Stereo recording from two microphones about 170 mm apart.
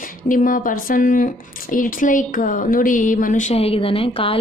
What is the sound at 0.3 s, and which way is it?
Speech, 55° left (ahead or behind).